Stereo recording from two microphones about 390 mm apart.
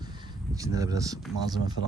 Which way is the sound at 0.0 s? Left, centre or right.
Centre.